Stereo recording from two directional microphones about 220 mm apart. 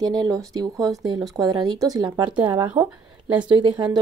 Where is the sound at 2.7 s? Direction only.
5° right (ahead or behind).